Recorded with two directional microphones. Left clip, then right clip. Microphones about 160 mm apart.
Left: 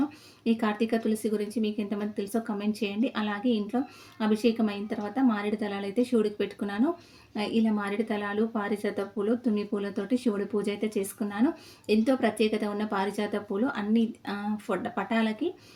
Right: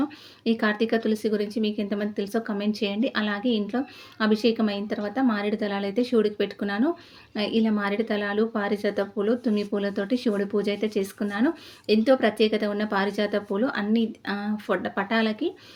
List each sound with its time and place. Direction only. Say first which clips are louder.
0.4 s speech: right 4 dB; 15° right (ahead or behind)